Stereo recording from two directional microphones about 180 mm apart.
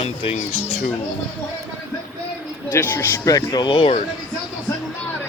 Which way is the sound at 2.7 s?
10° left (ahead or behind).